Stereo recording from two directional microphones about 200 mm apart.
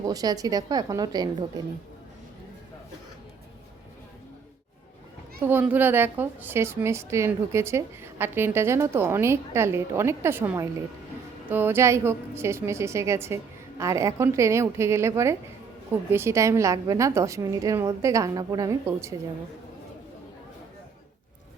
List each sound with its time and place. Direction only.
0.1 s a woman's voice: 20° right (ahead or behind)
5.4 s a woman's voice: 10° right (ahead or behind)